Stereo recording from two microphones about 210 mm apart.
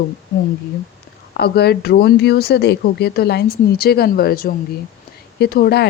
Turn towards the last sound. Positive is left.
turn(degrees=50)  # may be behind; listen again after turning